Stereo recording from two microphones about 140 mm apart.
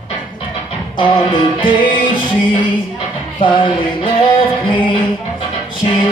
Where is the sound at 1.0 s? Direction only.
35° left (ahead or behind).